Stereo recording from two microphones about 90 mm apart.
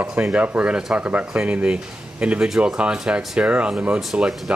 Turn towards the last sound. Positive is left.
turn(degrees=-5)  # may be behind; listen again after turning